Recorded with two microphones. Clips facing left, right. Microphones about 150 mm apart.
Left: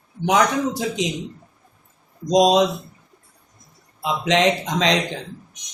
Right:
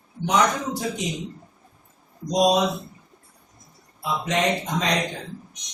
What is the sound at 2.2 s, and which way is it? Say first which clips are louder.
Speech: left 4 dB; 90° left.